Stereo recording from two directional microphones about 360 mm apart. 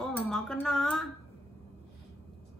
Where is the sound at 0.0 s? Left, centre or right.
Centre.